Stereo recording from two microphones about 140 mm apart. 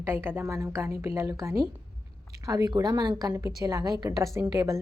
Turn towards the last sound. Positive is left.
turn(degrees=-25)  # may be behind; listen again after turning